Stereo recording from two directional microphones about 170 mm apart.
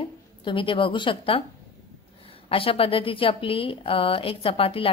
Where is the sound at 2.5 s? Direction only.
35° left (ahead or behind).